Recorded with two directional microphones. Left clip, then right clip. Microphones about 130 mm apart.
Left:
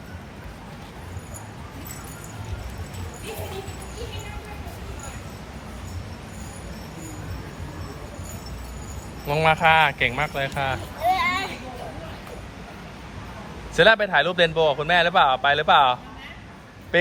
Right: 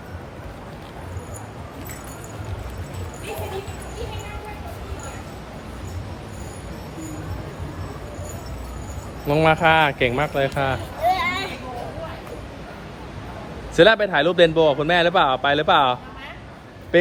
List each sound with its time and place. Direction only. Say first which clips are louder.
9.2 s a man's voice: right 2 dB; 5° right (ahead or behind)
11.0 s a sound: right 1 dB; 25° left (ahead or behind)
13.7 s a man's voice: right 2 dB; centre (ahead or behind)